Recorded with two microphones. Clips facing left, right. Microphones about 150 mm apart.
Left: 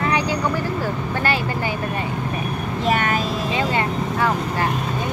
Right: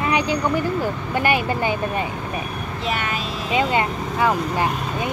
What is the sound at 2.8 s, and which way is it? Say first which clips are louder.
Vehicle: left 5 dB; 45° left (ahead or behind).